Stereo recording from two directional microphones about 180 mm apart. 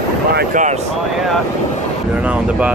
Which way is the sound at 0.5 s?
45° right (ahead or behind).